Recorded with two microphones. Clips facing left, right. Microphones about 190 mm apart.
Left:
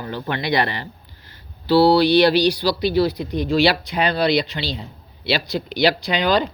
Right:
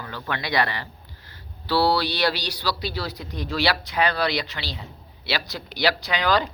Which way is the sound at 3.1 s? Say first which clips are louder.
Left 9 dB; 60° left (ahead or behind).